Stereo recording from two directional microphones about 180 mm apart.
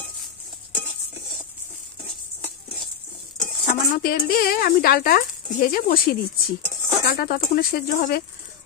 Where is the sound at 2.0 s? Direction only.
Centre (ahead or behind).